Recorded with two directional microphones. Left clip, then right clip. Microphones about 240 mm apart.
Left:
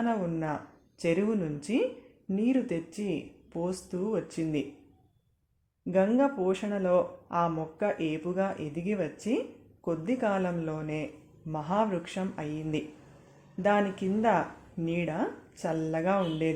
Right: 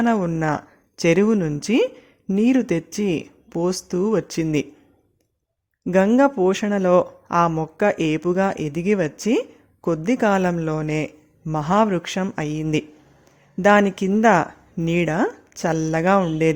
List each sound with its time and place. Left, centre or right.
0.0 s speech: right
5.8 s speech: right